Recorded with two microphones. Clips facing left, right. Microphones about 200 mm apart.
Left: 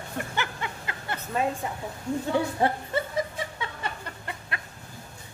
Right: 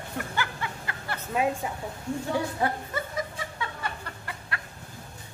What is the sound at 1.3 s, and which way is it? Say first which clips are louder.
Speech: right 1 dB; 5° right (ahead or behind).